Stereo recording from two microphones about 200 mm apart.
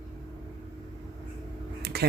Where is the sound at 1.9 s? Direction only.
50° right (ahead or behind).